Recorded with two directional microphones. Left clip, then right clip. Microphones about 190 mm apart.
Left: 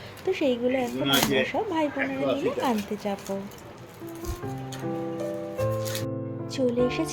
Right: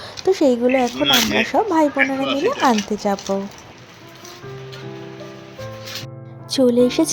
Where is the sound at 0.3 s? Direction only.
35° right (ahead or behind).